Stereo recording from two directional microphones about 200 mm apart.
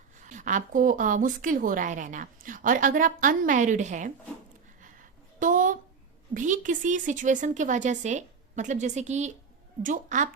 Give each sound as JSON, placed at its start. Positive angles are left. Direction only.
{"t": 0.2, "sound": "a woman's voice", "side_deg": -40}
{"t": 5.4, "sound": "a sound", "side_deg": -40}
{"t": 6.3, "sound": "a woman's voice", "side_deg": -40}